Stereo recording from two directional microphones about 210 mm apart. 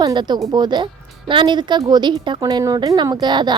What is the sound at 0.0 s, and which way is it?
A woman's voice, 20° right (ahead or behind).